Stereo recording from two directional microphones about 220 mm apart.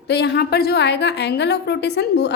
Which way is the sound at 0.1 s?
50° left (ahead or behind).